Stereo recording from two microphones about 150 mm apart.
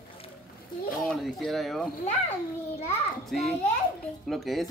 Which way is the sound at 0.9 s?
Centre (ahead or behind).